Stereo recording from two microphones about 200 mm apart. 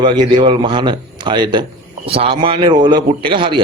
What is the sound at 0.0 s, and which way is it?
Speech, 25° right (ahead or behind).